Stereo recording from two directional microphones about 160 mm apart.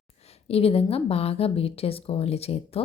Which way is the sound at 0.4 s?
40° left (ahead or behind).